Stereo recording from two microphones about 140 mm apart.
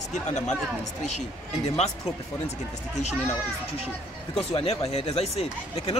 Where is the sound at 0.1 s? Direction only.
55° left (ahead or behind).